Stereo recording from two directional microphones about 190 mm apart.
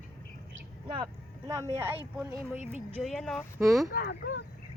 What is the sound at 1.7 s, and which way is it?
Speech, 10° right (ahead or behind).